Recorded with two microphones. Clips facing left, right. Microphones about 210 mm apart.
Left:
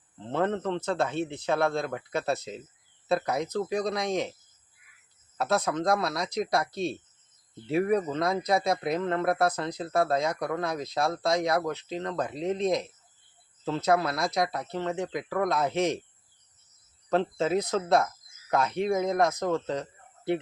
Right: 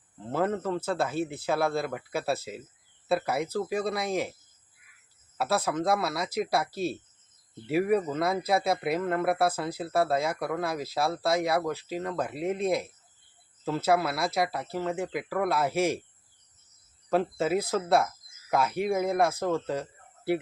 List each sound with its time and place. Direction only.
0.2 s speech: 5° right (ahead or behind)
5.4 s speech: 5° right (ahead or behind)
17.1 s speech: 5° right (ahead or behind)